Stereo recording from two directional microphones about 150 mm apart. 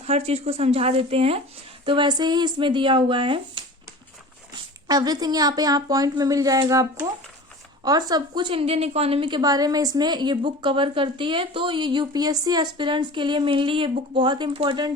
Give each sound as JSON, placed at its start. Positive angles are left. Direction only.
{"t": 0.0, "sound": "a woman's voice", "side_deg": -45}
{"t": 4.9, "sound": "a woman's voice", "side_deg": -25}